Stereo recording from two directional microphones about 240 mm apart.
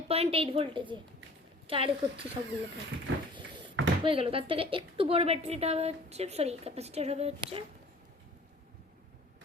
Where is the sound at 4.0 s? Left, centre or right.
Right.